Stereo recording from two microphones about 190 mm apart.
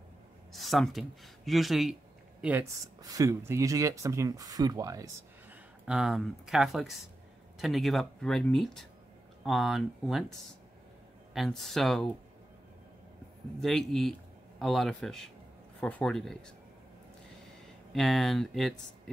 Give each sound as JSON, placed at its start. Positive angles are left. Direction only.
{"t": 0.5, "sound": "speech", "side_deg": 0}
{"t": 2.4, "sound": "speech", "side_deg": -15}
{"t": 5.9, "sound": "speech", "side_deg": -5}
{"t": 11.3, "sound": "speech", "side_deg": 0}
{"t": 13.6, "sound": "speech", "side_deg": 0}
{"t": 17.9, "sound": "speech", "side_deg": 0}